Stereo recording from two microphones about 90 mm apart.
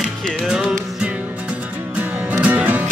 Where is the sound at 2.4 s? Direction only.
20° right (ahead or behind).